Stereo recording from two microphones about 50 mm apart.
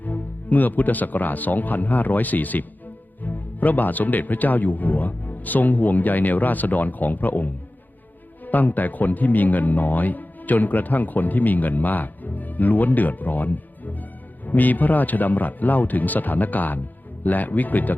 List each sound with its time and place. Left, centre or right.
0.0 s speech: left